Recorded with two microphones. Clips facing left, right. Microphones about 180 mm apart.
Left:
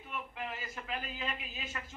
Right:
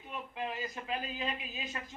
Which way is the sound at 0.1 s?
20° right (ahead or behind).